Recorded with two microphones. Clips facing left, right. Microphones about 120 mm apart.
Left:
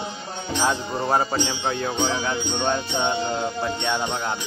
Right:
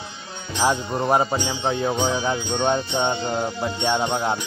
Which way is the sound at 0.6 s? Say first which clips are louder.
Right 3 dB; 15° right (ahead or behind).